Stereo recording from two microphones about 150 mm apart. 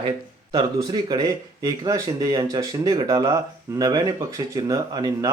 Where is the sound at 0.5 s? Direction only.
25° right (ahead or behind).